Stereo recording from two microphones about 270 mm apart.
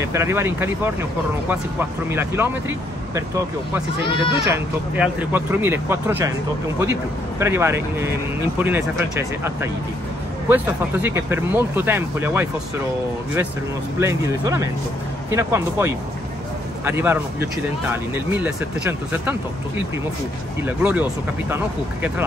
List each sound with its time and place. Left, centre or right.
0.0 s speech: centre
4.0 s speech: centre
4.5 s speech: centre
10.5 s speech: centre
13.9 s speech: centre
20.6 s speech: centre